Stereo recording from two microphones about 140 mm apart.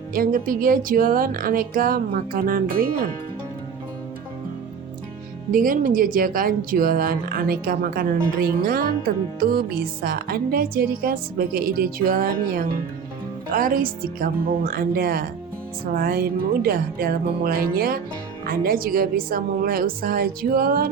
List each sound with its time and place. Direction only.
0.1 s speech: 85° right
5.5 s speech: 80° right